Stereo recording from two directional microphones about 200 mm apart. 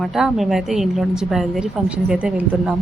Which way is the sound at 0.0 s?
Centre (ahead or behind).